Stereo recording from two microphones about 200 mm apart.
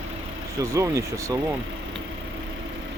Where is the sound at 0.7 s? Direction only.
15° right (ahead or behind).